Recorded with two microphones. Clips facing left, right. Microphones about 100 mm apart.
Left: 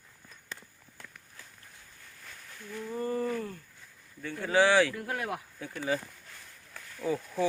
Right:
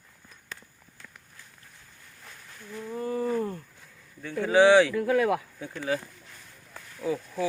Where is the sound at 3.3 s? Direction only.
30° right (ahead or behind).